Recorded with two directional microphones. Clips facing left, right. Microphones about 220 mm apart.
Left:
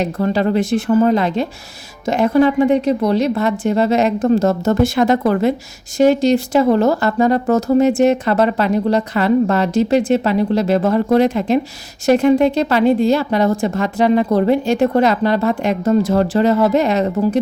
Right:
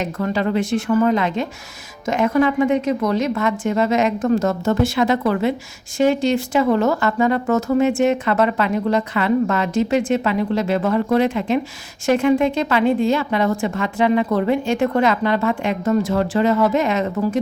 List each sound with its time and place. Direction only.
0.0 s speech: 35° left (ahead or behind)